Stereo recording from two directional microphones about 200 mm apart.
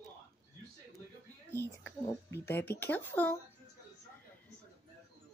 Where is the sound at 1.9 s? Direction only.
10° left (ahead or behind).